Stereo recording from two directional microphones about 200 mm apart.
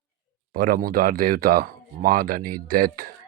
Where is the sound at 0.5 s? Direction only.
45° right (ahead or behind).